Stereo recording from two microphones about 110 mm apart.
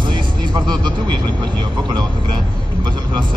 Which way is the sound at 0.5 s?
40° right (ahead or behind).